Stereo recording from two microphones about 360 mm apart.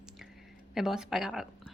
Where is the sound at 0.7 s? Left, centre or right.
Centre.